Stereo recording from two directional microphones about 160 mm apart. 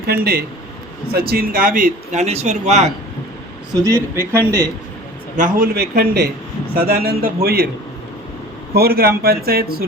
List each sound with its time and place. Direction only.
0.1 s speech: 70° right (ahead or behind)
2.2 s speech: 45° right (ahead or behind)
3.7 s a man's voice: 20° right (ahead or behind)
5.5 s speech: 75° right (ahead or behind)
8.7 s speech: 75° right (ahead or behind)